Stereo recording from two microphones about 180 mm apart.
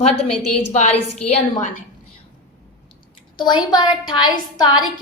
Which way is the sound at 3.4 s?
25° left (ahead or behind).